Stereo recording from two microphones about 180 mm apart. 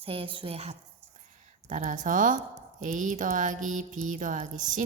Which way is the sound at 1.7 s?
45° right (ahead or behind).